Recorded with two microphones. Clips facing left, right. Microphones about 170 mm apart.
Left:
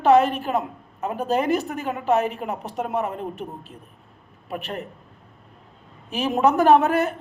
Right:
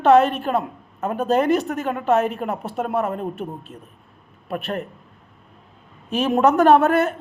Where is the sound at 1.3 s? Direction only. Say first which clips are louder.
Right 3 dB; 65° right (ahead or behind).